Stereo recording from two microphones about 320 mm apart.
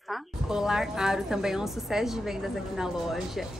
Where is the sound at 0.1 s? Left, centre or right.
Centre.